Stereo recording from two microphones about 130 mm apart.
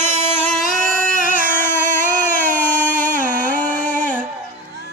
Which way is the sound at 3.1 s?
90° right.